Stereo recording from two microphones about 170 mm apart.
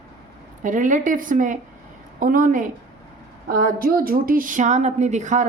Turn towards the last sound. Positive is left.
turn(degrees=-45)  # may be behind; listen again after turning